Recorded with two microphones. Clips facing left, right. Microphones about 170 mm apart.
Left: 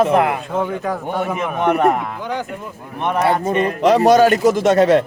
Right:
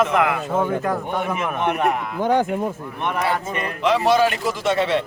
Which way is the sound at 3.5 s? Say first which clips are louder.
Left 6 dB; 40° left (ahead or behind).